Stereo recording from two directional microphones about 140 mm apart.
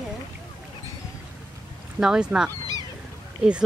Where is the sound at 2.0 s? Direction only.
5° right (ahead or behind).